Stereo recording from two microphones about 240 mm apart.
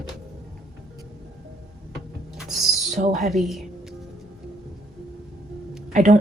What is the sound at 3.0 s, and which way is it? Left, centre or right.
Speech, right.